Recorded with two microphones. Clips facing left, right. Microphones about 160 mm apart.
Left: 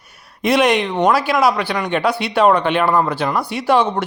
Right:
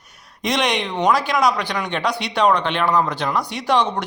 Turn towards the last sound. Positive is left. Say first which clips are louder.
# left 4 dB
turn(degrees=5)  # may be behind; listen again after turning